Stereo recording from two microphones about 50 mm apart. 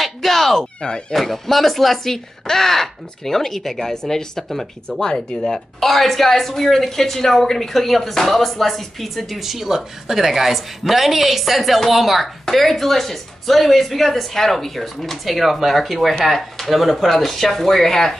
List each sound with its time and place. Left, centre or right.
0.0 s a sound: centre
0.7 s speech: centre
1.1 s speech: centre